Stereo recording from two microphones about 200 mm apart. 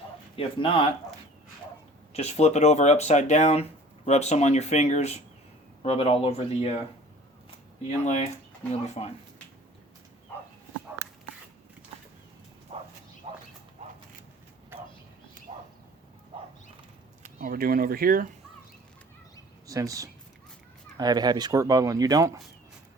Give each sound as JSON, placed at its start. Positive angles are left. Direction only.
{"t": 0.3, "sound": "speech", "side_deg": 25}
{"t": 2.1, "sound": "speech", "side_deg": 35}
{"t": 8.0, "sound": "speech", "side_deg": 35}
{"t": 12.7, "sound": "bow-wow", "side_deg": -25}
{"t": 15.5, "sound": "a sound", "side_deg": -30}
{"t": 17.4, "sound": "speech", "side_deg": -45}
{"t": 19.6, "sound": "speech", "side_deg": -15}